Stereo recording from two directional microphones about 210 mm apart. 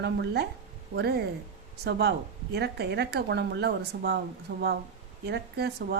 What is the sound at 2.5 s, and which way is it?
A woman's voice, 50° right (ahead or behind).